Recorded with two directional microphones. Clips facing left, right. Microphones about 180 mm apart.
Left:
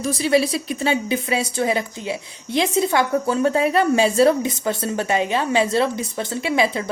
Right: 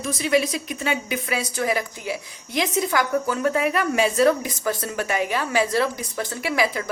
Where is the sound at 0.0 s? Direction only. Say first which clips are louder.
Left 3 dB; 35° left (ahead or behind).